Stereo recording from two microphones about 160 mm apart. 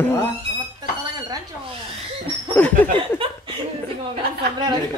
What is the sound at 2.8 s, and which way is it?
Speech, 10° left (ahead or behind).